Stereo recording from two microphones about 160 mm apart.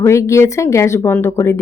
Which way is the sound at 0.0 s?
20° left (ahead or behind).